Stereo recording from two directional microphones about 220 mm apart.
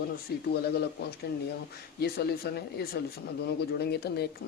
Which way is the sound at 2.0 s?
45° left (ahead or behind).